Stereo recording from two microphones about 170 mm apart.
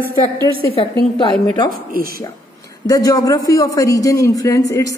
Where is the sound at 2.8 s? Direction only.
20° left (ahead or behind).